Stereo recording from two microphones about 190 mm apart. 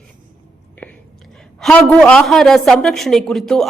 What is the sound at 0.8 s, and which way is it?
Whispering, 10° left (ahead or behind).